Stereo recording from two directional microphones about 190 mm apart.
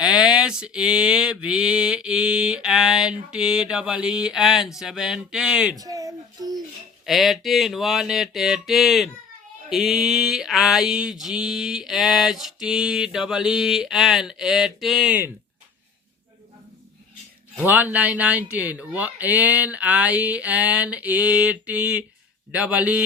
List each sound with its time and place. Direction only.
0.0 s mantra: 5° right (ahead or behind)
5.8 s a sound: 20° right (ahead or behind)
7.0 s mantra: centre (ahead or behind)
17.6 s speech: 10° right (ahead or behind)